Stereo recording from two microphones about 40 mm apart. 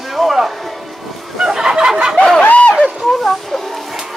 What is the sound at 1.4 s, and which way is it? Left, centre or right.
Fowl, centre.